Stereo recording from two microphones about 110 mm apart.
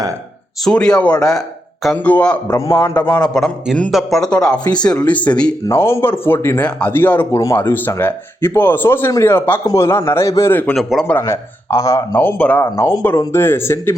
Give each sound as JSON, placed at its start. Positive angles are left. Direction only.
{"t": 0.6, "sound": "speech", "side_deg": 5}
{"t": 2.5, "sound": "speech", "side_deg": 30}
{"t": 3.9, "sound": "speech", "side_deg": 0}
{"t": 5.6, "sound": "speech", "side_deg": 25}
{"t": 10.8, "sound": "speech", "side_deg": 0}
{"t": 11.2, "sound": "speech", "side_deg": 30}
{"t": 12.6, "sound": "speech", "side_deg": 25}